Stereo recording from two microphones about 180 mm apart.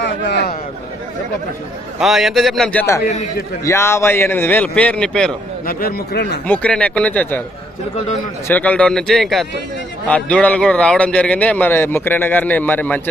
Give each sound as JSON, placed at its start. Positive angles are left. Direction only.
{"t": 0.0, "sound": "a man's voice", "side_deg": 65}
{"t": 2.0, "sound": "a man's voice", "side_deg": 0}
{"t": 5.6, "sound": "speech", "side_deg": 55}
{"t": 6.5, "sound": "a man's voice", "side_deg": 5}
{"t": 8.4, "sound": "a man's voice", "side_deg": 10}